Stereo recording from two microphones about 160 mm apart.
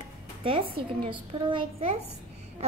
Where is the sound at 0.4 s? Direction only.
35° right (ahead or behind).